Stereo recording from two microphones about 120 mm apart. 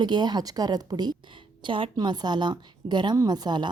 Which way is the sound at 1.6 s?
45° right (ahead or behind).